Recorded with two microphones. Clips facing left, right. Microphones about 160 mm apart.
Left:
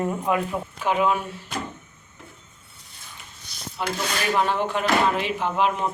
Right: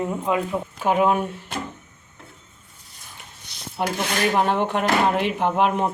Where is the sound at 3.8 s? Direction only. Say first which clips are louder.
Right 4 dB; 55° right (ahead or behind).